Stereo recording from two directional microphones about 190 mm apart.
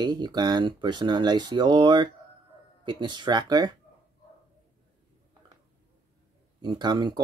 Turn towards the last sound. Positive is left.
turn(degrees=-20)  # may be behind; listen again after turning